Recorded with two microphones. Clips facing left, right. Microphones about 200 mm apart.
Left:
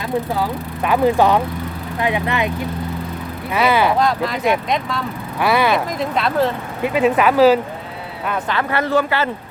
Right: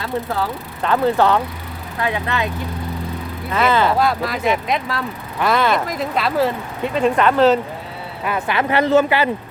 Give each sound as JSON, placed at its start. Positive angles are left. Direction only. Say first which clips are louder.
{"t": 0.0, "sound": "speech", "louder": "left 2 dB", "side_deg": 15}
{"t": 3.5, "sound": "speech", "louder": "left 1 dB", "side_deg": 10}
{"t": 3.9, "sound": "speech", "louder": "left 1 dB", "side_deg": -5}
{"t": 5.4, "sound": "speech", "louder": "left 1 dB", "side_deg": 10}
{"t": 8.3, "sound": "speech", "louder": "right 2 dB", "side_deg": -15}